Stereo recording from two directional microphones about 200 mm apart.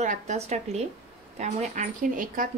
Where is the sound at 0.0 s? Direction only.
35° right (ahead or behind).